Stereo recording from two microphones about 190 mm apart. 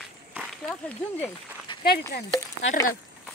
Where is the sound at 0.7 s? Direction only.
10° left (ahead or behind).